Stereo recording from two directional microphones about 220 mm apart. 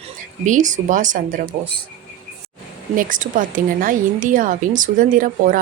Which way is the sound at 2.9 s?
40° right (ahead or behind).